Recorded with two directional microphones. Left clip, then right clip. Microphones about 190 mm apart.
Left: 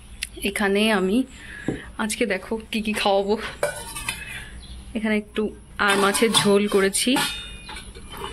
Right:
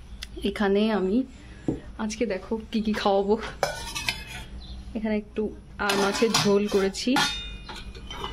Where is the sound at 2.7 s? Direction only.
25° right (ahead or behind).